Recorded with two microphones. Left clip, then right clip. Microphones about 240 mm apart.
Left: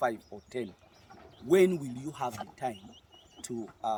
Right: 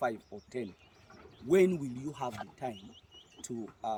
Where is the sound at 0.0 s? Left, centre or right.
Centre.